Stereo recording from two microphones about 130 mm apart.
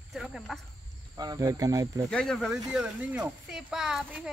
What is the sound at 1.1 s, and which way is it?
Speech, 30° right (ahead or behind).